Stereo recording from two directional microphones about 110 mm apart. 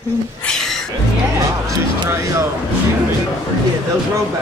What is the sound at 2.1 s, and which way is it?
Speech, 25° right (ahead or behind).